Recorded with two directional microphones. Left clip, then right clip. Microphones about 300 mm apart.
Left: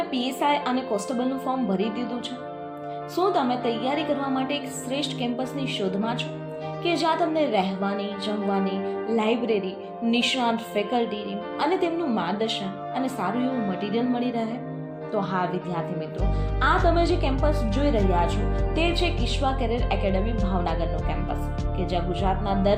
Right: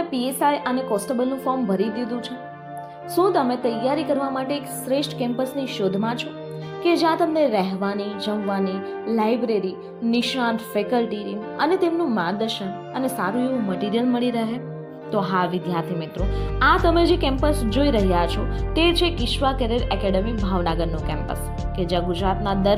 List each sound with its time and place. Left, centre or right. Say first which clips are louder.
0.1 s a woman's voice: right 4 dB; centre
3.2 s a woman's voice: right 4 dB; centre